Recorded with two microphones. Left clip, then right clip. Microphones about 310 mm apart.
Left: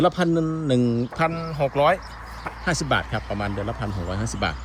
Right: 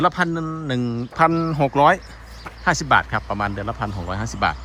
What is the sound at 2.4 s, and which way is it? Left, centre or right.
Speech, centre.